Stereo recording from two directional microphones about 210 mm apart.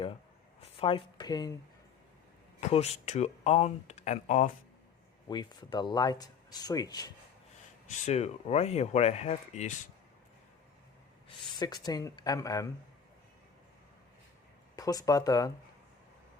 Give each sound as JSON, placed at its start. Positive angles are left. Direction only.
{"t": 0.6, "sound": "speech", "side_deg": 25}
{"t": 2.6, "sound": "speech", "side_deg": 30}
{"t": 5.3, "sound": "speech", "side_deg": 20}
{"t": 7.9, "sound": "speech", "side_deg": 30}
{"t": 11.5, "sound": "speech", "side_deg": 20}
{"t": 14.8, "sound": "speech", "side_deg": 15}